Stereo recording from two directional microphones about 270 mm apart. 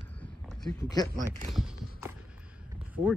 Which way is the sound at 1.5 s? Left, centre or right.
Centre.